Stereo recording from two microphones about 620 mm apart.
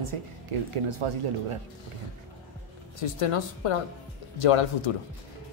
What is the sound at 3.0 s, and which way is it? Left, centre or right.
A woman's voice, left.